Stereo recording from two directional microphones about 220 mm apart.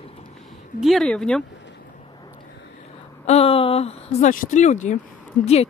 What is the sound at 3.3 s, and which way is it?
Speech, 25° left (ahead or behind).